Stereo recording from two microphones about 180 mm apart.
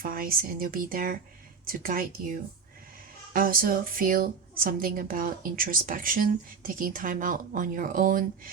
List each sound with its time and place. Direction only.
0.0 s a woman's voice: 50° right (ahead or behind)
3.3 s a woman's voice: 50° right (ahead or behind)